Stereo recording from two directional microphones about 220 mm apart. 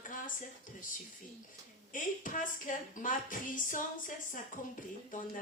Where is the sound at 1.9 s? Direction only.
35° left (ahead or behind).